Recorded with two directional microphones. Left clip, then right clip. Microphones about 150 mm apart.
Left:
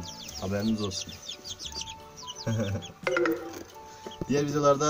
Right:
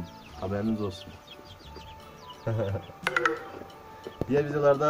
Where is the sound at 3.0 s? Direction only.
50° right (ahead or behind).